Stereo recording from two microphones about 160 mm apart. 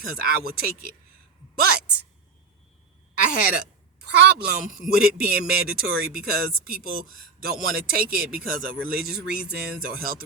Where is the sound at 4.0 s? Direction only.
75° right (ahead or behind).